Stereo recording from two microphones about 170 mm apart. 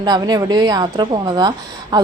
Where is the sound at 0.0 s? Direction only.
25° right (ahead or behind).